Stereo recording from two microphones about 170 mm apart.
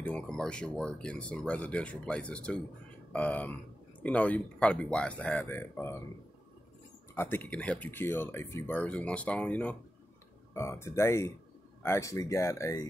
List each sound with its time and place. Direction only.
0.0 s speech: 5° left (ahead or behind)
7.2 s speech: 10° left (ahead or behind)